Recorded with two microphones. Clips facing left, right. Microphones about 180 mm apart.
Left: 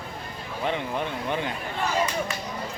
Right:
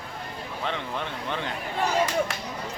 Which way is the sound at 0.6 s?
15° left (ahead or behind).